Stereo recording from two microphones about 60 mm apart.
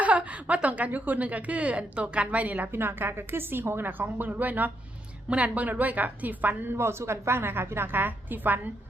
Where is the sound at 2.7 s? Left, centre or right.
Right.